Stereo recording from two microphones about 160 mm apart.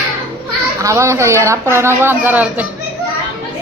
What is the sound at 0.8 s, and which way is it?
Speech, 20° right (ahead or behind).